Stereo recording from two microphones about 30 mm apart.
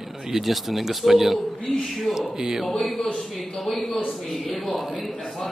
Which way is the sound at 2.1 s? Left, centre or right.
Centre.